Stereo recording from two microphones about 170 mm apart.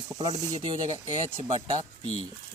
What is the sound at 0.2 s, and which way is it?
Speech, 20° right (ahead or behind).